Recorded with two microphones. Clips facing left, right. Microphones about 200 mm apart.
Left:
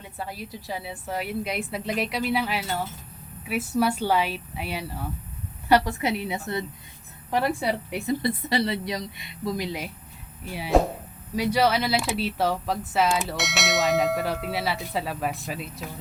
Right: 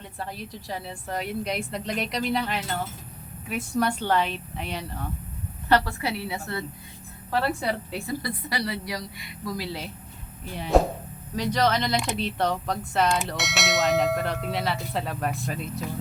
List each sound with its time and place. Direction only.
0.2 s a woman's voice: 5° left (ahead or behind)
10.5 s speech: 5° left (ahead or behind)